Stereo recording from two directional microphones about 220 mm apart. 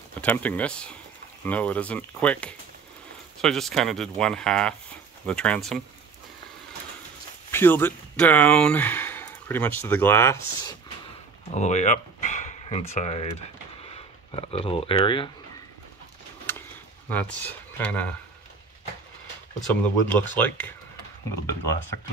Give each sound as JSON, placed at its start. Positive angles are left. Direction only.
{"t": 0.2, "sound": "speech", "side_deg": 5}
{"t": 7.5, "sound": "speech", "side_deg": 10}
{"t": 11.5, "sound": "a sound", "side_deg": 30}
{"t": 12.9, "sound": "speech", "side_deg": 30}
{"t": 16.5, "sound": "a sound", "side_deg": 10}
{"t": 17.1, "sound": "speech", "side_deg": 10}
{"t": 19.6, "sound": "speech", "side_deg": 5}